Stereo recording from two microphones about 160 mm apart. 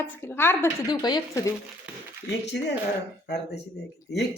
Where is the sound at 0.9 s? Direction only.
25° left (ahead or behind).